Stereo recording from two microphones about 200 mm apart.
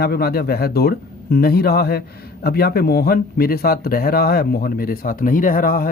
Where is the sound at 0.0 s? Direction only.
50° left (ahead or behind).